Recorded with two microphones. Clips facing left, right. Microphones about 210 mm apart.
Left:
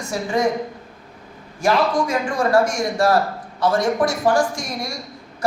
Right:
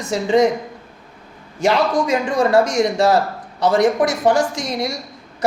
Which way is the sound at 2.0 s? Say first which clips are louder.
Right 3 dB; 20° right (ahead or behind).